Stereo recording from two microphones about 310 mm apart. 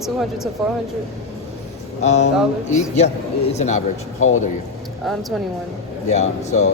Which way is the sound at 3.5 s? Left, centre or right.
Left.